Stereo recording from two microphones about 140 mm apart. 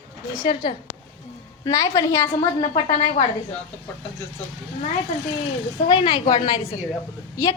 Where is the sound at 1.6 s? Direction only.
25° left (ahead or behind).